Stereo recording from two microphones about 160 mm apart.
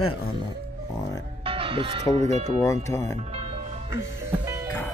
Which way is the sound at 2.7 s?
20° left (ahead or behind).